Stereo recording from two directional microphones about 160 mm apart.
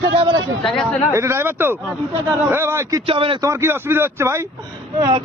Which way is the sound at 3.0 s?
35° right (ahead or behind).